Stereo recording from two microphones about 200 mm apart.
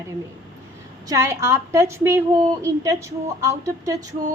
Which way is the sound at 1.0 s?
15° right (ahead or behind).